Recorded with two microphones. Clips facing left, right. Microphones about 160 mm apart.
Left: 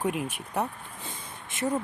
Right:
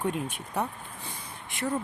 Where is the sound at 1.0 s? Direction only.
20° left (ahead or behind).